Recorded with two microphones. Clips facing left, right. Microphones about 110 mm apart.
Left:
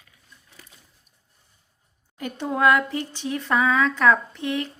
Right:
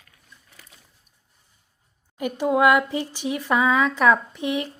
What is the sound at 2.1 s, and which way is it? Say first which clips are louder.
Speech: right 5 dB; 15° right (ahead or behind).